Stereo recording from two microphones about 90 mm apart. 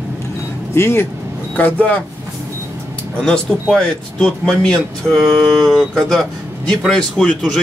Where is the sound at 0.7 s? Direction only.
25° left (ahead or behind).